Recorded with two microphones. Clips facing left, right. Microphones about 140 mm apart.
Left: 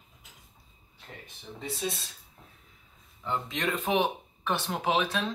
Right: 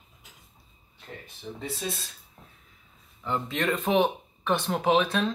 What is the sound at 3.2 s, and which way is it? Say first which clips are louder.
Speech: right 3 dB; 15° left (ahead or behind).